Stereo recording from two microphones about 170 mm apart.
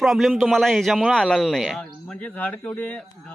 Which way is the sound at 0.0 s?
Centre (ahead or behind).